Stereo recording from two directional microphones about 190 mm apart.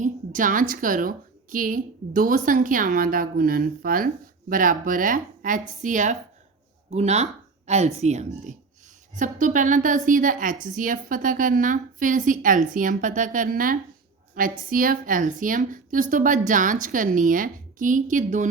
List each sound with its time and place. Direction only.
0.0 s a woman's voice: 45° right (ahead or behind)